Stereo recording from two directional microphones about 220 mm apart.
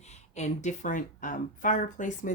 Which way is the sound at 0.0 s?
30° left (ahead or behind).